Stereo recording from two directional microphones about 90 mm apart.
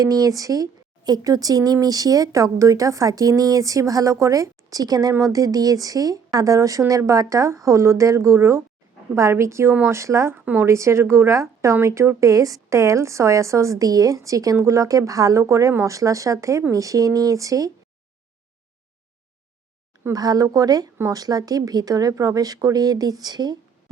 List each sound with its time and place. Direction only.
0.0 s a woman's voice: 40° right (ahead or behind)
10.4 s a woman's voice: 20° right (ahead or behind)
10.7 s a woman's voice: 30° right (ahead or behind)
20.1 s speech: 45° right (ahead or behind)